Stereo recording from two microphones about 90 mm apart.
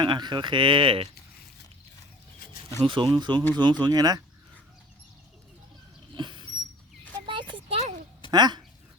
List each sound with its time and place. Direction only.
0.0 s speech: 55° right (ahead or behind); by 1.0 s 85° right
2.8 s speech: 65° right (ahead or behind); by 4.2 s 45° right (ahead or behind)
6.1 s a sound: 60° right (ahead or behind); by 7.9 s 80° right
8.3 s speech: 50° right (ahead or behind)